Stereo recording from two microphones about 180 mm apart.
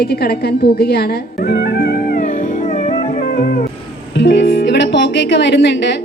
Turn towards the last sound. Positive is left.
turn(degrees=75)  # may be behind; listen again after turning